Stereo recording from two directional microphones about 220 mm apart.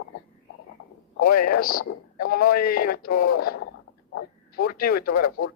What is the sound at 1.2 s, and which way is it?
Speech, 40° left (ahead or behind).